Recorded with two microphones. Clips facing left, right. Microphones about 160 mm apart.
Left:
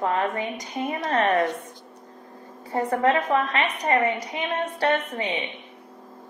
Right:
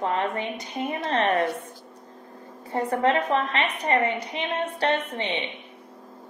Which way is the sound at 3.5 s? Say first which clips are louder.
Left 1 dB; 30° right (ahead or behind).